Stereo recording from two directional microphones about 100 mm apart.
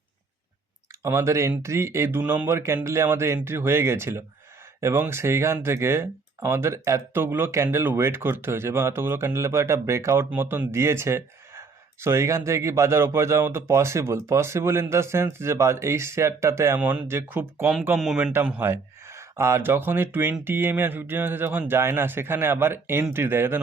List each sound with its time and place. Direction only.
1.0 s speech: 30° right (ahead or behind)
17.9 s speech: 10° right (ahead or behind)